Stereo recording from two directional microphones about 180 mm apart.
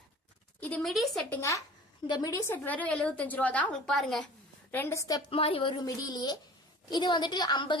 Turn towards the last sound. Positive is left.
turn(degrees=25)  # may be behind; listen again after turning